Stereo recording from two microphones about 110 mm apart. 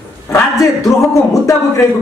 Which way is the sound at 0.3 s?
30° left (ahead or behind).